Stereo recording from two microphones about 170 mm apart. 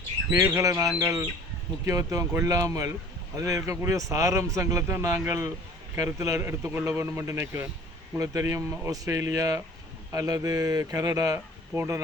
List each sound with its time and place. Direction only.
0.3 s a man's voice: 15° right (ahead or behind)